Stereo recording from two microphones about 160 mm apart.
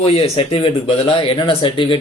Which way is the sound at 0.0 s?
40° left (ahead or behind).